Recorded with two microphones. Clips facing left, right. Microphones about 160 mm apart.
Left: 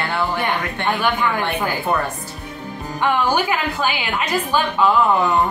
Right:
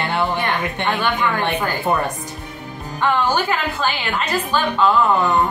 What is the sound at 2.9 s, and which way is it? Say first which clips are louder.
A woman's voice: even; 10° left (ahead or behind).